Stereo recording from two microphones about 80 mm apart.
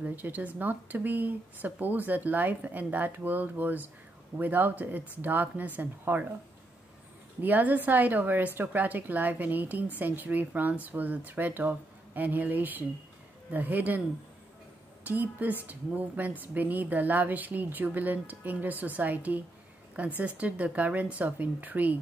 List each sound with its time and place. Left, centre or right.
0.0 s a woman's voice: right
7.4 s a woman's voice: right
15.0 s a woman's voice: centre